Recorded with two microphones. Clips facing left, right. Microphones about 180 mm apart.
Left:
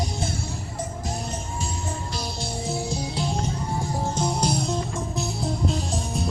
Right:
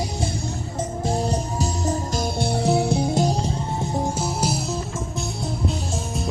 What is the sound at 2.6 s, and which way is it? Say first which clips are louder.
Music: right 8 dB; 65° right (ahead or behind).